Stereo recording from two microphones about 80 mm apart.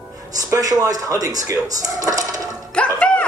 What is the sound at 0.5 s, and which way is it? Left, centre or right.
Speech, right.